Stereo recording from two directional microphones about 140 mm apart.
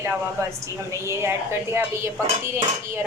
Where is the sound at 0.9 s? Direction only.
20° right (ahead or behind).